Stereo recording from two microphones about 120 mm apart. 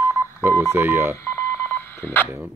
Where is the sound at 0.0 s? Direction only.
20° right (ahead or behind).